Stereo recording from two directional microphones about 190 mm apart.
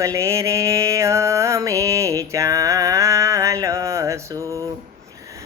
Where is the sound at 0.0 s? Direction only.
15° right (ahead or behind).